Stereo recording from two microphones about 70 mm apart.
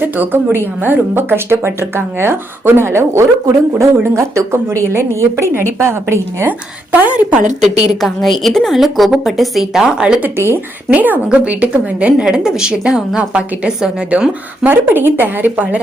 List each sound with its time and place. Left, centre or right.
0.0 s a woman's voice: right
6.9 s speech: right
7.6 s a woman's voice: centre
10.2 s a woman's voice: right
11.3 s a woman's voice: centre
14.6 s speech: right